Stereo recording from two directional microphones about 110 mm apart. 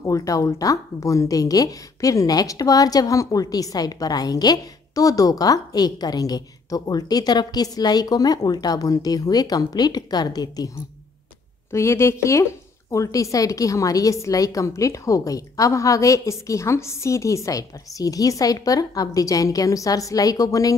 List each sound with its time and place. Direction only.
0.0 s a woman's voice: 30° left (ahead or behind)
11.7 s a woman's voice: 25° left (ahead or behind)